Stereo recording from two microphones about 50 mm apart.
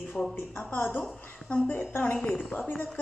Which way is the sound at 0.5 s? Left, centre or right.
Left.